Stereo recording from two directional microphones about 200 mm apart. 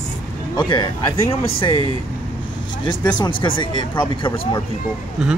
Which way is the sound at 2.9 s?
25° left (ahead or behind).